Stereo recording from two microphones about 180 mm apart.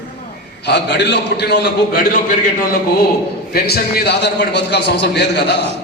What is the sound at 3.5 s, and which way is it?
A man's voice, 60° left (ahead or behind).